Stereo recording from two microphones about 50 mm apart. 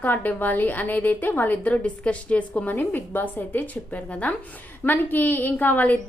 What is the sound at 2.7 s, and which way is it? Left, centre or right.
A woman's voice, left.